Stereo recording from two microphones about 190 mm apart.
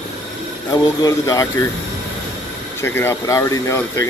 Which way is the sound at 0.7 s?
15° left (ahead or behind).